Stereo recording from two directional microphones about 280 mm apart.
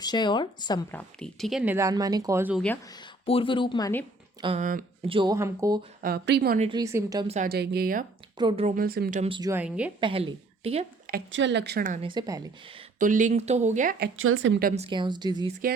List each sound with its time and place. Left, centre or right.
0.0 s speech: centre
3.2 s speech: centre
4.4 s speech: right
5.1 s speech: centre
6.0 s speech: right
6.7 s speech: centre
7.3 s speech: right
8.4 s a woman's voice: centre
10.0 s a woman's voice: centre
12.1 s speech: centre
13.0 s a woman's voice: right
14.2 s a woman's voice: right
14.8 s speech: centre